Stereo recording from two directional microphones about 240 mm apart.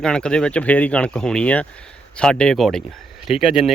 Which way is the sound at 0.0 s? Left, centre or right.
Centre.